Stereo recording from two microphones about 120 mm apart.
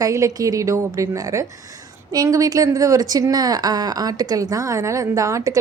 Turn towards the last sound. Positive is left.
turn(degrees=-25)  # may be behind; listen again after turning